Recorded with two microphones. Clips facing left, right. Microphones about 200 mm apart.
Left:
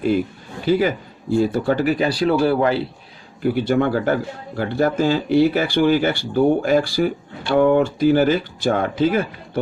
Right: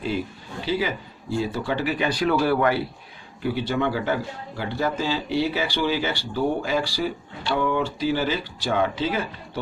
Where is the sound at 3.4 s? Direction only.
50° left (ahead or behind).